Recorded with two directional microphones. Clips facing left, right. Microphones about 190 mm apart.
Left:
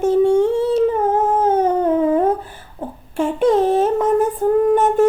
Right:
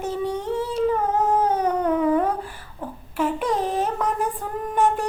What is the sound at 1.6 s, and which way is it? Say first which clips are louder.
Cat: left 5 dB; 25° left (ahead or behind).